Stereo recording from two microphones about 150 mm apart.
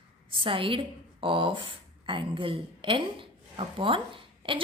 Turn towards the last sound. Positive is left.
turn(degrees=-35)  # may be behind; listen again after turning